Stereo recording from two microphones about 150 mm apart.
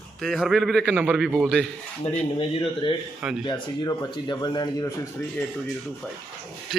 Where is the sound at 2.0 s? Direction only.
40° left (ahead or behind); by 5.4 s 20° left (ahead or behind).